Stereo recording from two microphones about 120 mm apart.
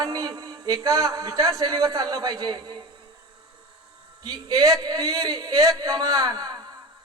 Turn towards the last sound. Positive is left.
turn(degrees=-35)  # may be behind; listen again after turning